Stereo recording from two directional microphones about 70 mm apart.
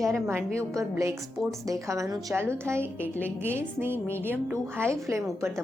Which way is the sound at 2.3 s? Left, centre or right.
Right.